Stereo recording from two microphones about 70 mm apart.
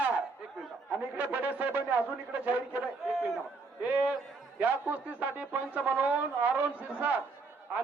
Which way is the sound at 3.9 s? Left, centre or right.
Right.